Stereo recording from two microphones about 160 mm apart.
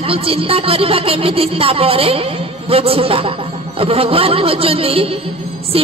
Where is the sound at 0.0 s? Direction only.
35° right (ahead or behind).